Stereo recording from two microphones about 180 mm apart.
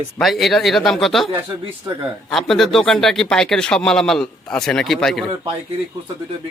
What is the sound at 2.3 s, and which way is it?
Speech, centre (ahead or behind).